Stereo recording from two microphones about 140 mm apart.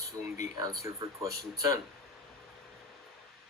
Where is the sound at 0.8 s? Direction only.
25° right (ahead or behind).